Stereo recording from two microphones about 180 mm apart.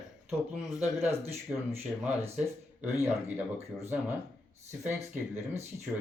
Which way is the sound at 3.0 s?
10° right (ahead or behind).